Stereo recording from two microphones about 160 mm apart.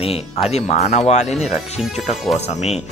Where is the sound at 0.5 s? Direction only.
45° left (ahead or behind).